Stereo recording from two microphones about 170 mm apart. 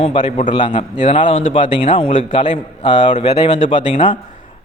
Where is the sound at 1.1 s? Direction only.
30° left (ahead or behind).